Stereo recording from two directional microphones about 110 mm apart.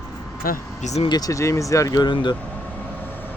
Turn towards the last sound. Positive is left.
turn(degrees=15)  # may be behind; listen again after turning